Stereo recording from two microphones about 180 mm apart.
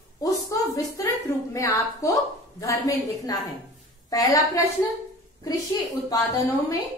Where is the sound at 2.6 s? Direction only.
20° left (ahead or behind).